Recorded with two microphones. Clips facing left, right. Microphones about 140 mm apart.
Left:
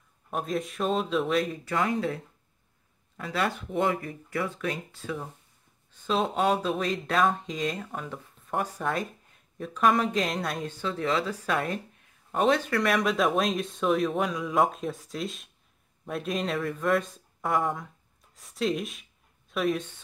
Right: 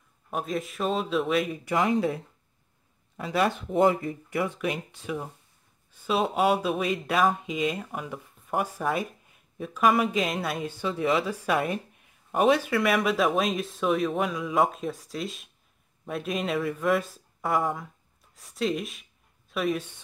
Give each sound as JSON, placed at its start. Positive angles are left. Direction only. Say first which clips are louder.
{"t": 0.3, "sound": "speech", "louder": "even", "side_deg": 0}
{"t": 1.6, "sound": "speech", "louder": "right 3 dB", "side_deg": -15}